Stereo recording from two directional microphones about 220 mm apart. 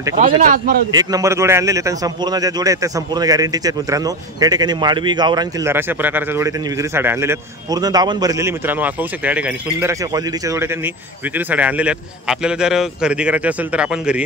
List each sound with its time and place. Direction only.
0.4 s speech: 35° right (ahead or behind)
0.9 s a man's voice: 15° right (ahead or behind)